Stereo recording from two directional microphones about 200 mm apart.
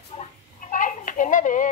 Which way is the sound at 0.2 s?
40° left (ahead or behind).